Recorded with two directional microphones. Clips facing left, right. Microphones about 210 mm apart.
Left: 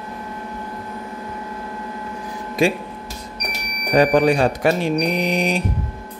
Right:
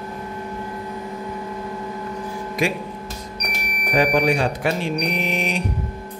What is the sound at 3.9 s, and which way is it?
Speech, 40° left (ahead or behind).